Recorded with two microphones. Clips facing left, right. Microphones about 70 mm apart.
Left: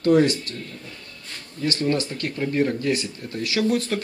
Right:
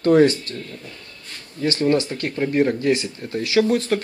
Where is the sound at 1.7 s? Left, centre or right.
Right.